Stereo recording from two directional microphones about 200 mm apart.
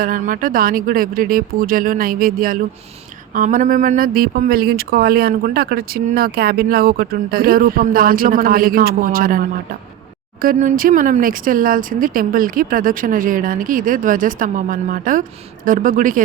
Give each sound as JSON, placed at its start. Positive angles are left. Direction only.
{"t": 0.0, "sound": "speech", "side_deg": -45}